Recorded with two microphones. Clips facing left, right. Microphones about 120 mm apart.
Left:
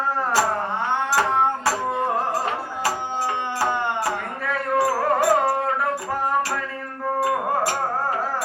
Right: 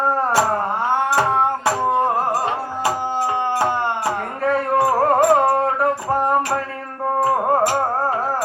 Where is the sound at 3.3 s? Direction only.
35° right (ahead or behind).